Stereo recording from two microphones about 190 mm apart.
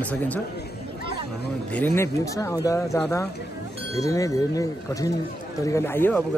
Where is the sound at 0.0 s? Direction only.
10° left (ahead or behind).